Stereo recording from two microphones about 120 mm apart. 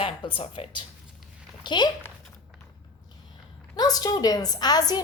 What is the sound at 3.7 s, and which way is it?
A woman's voice, 30° left (ahead or behind).